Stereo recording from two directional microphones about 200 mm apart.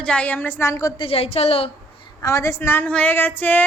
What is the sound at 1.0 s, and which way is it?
Speech, 30° left (ahead or behind).